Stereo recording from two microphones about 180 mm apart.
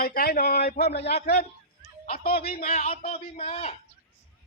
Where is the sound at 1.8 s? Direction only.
55° left (ahead or behind).